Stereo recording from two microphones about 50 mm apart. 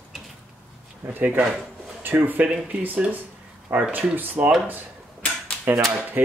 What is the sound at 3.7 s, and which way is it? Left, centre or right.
Speech, right.